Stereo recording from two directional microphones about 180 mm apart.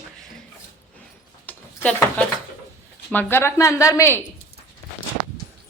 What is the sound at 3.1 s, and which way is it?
A woman's voice, 10° left (ahead or behind).